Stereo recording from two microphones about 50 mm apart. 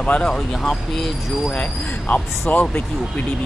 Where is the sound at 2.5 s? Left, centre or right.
Left.